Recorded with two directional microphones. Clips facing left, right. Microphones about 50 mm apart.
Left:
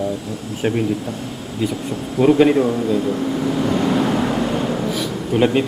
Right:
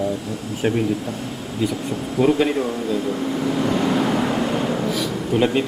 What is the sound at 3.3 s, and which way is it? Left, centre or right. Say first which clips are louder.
Vehicle: left 1 dB; centre.